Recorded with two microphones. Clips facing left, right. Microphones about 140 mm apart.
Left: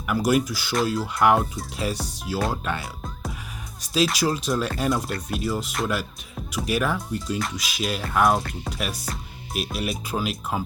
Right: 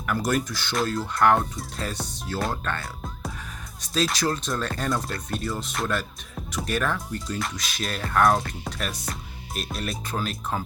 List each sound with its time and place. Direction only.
0.0 s speech: 10° left (ahead or behind)